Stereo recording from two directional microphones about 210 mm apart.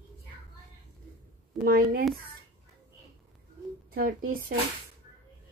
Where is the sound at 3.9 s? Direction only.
45° right (ahead or behind).